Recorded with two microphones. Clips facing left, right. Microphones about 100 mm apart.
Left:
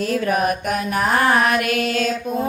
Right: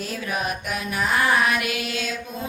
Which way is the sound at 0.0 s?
55° left (ahead or behind).